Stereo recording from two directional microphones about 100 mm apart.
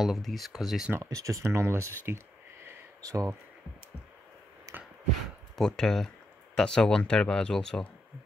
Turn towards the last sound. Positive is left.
turn(degrees=5)  # may be behind; listen again after turning